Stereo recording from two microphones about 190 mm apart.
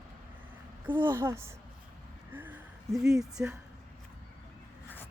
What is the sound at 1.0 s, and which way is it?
Speech, 15° right (ahead or behind).